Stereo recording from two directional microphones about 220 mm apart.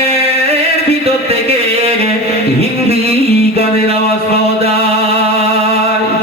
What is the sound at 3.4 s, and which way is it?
Music, 25° right (ahead or behind).